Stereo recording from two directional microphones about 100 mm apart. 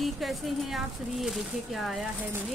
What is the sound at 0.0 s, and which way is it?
Speech, centre (ahead or behind).